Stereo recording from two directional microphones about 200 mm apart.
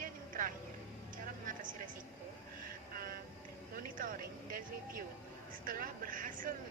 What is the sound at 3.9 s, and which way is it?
Vehicle, 45° right (ahead or behind).